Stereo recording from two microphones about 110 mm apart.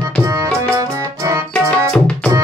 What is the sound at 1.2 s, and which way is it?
Music, 25° right (ahead or behind).